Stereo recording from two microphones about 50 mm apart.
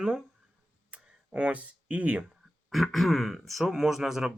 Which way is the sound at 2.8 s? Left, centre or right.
Centre.